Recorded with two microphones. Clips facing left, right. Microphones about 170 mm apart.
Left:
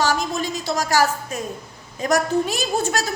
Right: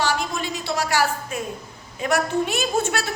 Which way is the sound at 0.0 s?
40° left (ahead or behind).